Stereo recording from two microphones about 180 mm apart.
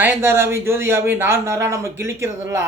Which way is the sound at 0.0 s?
15° right (ahead or behind).